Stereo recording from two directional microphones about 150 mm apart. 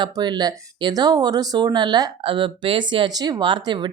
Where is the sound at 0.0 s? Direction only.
30° right (ahead or behind).